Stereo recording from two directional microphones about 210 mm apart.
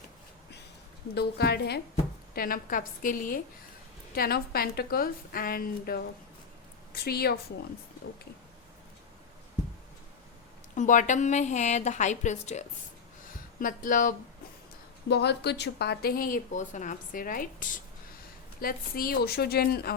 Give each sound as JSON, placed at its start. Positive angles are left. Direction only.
{"t": 1.1, "sound": "a woman's voice", "side_deg": 50}
{"t": 10.8, "sound": "a woman's voice", "side_deg": 35}
{"t": 15.1, "sound": "speech", "side_deg": 50}